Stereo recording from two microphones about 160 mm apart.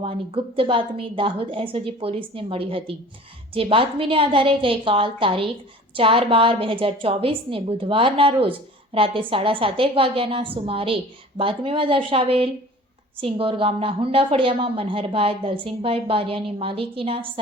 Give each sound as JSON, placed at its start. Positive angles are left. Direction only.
{"t": 0.0, "sound": "a woman's voice", "side_deg": -35}